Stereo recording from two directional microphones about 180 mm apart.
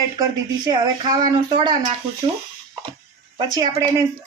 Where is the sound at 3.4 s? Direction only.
20° right (ahead or behind).